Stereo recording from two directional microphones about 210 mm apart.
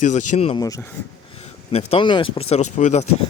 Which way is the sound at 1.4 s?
30° left (ahead or behind).